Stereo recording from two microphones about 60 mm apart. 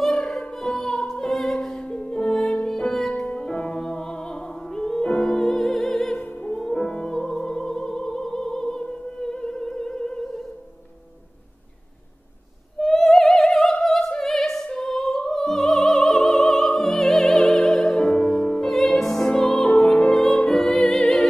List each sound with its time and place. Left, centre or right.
0.0 s music: centre
3.3 s opera: centre
6.5 s music: centre
12.7 s opera: centre
18.1 s music: centre
18.7 s music: centre